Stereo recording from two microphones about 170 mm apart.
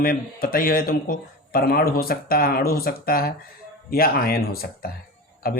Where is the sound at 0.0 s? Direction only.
60° left (ahead or behind).